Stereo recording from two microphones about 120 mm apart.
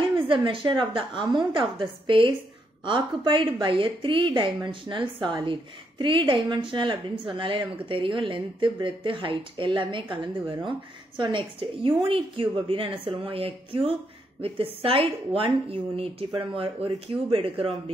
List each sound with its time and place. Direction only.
0.1 s a woman's voice: 45° right (ahead or behind)